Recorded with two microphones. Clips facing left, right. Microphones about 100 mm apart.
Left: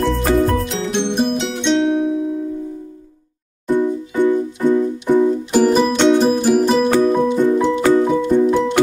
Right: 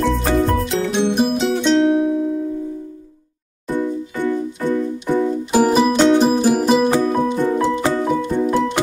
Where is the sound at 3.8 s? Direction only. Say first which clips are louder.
Left 4 dB; 15° left (ahead or behind).